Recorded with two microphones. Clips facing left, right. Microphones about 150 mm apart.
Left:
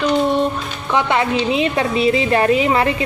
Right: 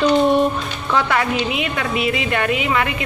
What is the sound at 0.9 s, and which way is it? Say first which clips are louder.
A woman's voice: left 2 dB; 20° left (ahead or behind).